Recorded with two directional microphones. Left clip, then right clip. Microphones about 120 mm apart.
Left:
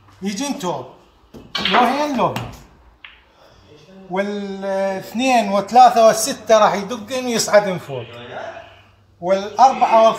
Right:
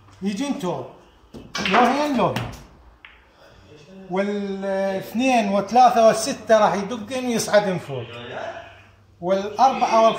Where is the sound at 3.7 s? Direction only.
15° left (ahead or behind).